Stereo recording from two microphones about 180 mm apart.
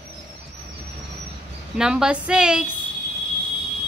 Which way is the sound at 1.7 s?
5° right (ahead or behind).